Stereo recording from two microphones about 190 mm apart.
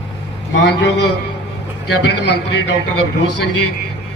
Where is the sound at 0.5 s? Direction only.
65° left (ahead or behind).